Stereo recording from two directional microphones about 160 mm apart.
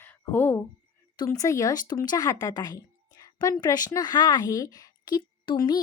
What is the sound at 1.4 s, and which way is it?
Speech, 20° left (ahead or behind).